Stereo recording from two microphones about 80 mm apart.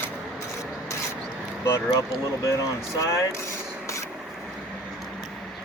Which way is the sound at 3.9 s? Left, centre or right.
Left.